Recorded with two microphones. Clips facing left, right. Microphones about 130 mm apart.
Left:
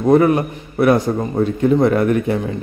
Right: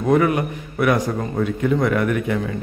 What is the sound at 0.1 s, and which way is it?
A man's voice, 35° left (ahead or behind).